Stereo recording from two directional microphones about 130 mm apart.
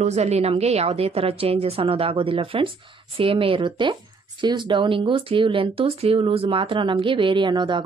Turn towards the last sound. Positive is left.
turn(degrees=-35)  # may be behind; listen again after turning